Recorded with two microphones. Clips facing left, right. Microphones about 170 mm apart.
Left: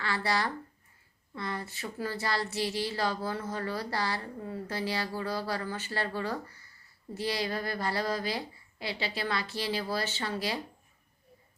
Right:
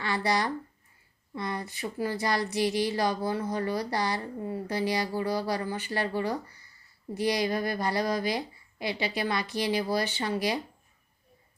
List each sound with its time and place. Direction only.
0.0 s speech: 15° right (ahead or behind)